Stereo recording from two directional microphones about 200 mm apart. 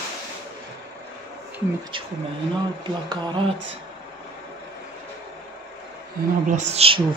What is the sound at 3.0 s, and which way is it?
Speech, 20° right (ahead or behind).